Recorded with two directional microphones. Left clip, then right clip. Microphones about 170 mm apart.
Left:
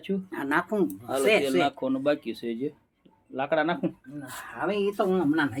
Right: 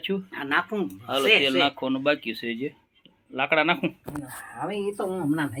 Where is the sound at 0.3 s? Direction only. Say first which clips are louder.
Even; 85° left.